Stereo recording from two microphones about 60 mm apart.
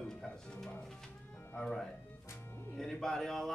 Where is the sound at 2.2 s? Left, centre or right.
Left.